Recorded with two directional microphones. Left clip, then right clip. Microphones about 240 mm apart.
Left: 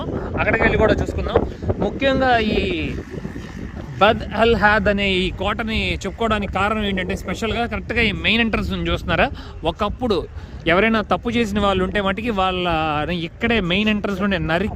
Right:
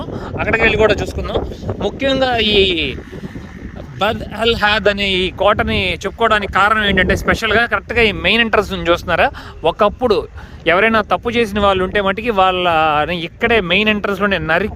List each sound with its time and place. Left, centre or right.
0.5 s a man's voice: right
2.4 s a man's voice: right
4.0 s speech: centre
4.6 s speech: right; by 14.7 s centre